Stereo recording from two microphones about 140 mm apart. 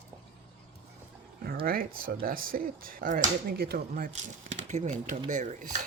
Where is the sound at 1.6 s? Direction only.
90° right.